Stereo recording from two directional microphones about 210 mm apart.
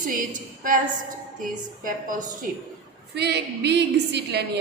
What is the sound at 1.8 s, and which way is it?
Speech, 40° right (ahead or behind).